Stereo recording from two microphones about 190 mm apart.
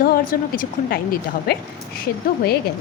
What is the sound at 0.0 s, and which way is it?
Speech, 50° left (ahead or behind).